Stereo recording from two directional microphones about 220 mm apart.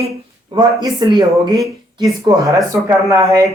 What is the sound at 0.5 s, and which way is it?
Speech, 20° right (ahead or behind).